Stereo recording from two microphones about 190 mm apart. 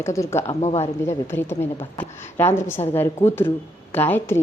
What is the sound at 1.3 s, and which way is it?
A woman's voice, 10° left (ahead or behind).